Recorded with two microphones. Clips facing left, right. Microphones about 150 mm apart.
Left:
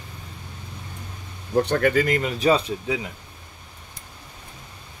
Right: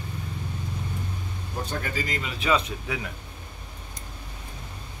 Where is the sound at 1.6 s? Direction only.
65° left (ahead or behind); by 3.1 s 20° left (ahead or behind).